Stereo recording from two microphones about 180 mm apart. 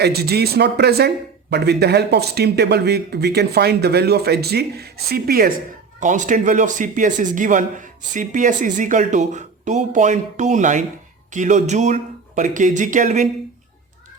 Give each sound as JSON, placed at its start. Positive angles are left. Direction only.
{"t": 0.0, "sound": "speech", "side_deg": -65}
{"t": 6.0, "sound": "speech", "side_deg": -45}